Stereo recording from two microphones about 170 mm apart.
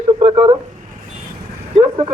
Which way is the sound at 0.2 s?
35° right (ahead or behind).